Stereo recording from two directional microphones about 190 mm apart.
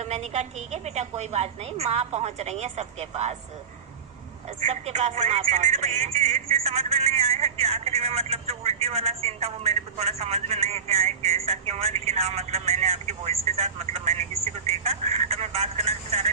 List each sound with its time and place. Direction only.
0.0 s speech: 35° right (ahead or behind)
4.6 s speech: 35° right (ahead or behind)